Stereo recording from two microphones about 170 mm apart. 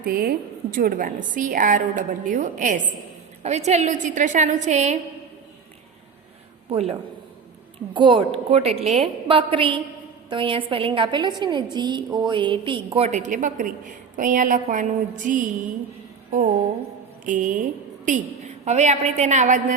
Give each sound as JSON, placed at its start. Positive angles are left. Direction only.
{"t": 0.0, "sound": "a woman's voice", "side_deg": -60}
{"t": 6.7, "sound": "a woman's voice", "side_deg": -35}
{"t": 7.9, "sound": "a woman's voice", "side_deg": -30}
{"t": 17.2, "sound": "a woman's voice", "side_deg": -50}